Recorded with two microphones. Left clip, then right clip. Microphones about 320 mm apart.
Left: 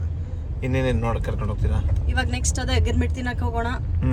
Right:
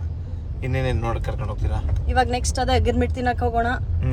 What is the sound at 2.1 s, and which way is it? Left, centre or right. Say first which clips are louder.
Speech: right 6 dB; centre.